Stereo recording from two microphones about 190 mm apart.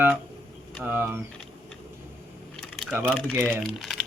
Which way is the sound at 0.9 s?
10° right (ahead or behind).